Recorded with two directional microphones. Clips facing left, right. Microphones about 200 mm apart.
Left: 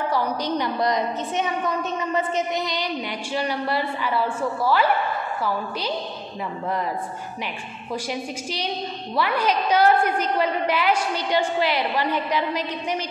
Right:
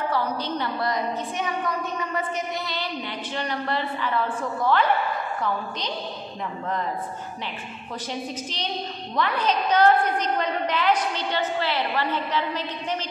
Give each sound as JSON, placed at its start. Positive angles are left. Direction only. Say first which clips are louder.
{"t": 0.1, "sound": "a woman's voice", "louder": "left 3 dB", "side_deg": 15}
{"t": 8.1, "sound": "a woman's voice", "louder": "left 2 dB", "side_deg": 10}